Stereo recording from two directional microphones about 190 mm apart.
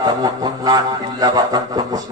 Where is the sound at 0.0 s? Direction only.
20° right (ahead or behind).